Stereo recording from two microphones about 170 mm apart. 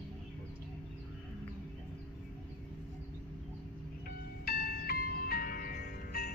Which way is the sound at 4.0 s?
60° left (ahead or behind).